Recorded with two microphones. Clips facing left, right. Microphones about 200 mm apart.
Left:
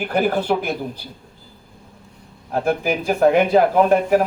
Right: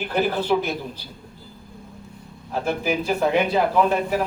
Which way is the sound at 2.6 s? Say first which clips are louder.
Left 3 dB; 50° left (ahead or behind).